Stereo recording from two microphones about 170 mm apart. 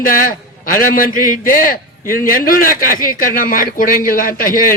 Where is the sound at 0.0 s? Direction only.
55° left (ahead or behind).